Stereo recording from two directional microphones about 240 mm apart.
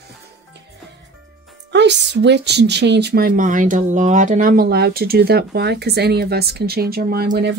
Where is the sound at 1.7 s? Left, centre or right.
Right.